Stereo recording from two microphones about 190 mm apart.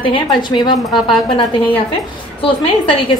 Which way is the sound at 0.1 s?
25° left (ahead or behind).